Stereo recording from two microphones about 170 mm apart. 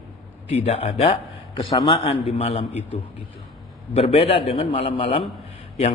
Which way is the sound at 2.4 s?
40° left (ahead or behind).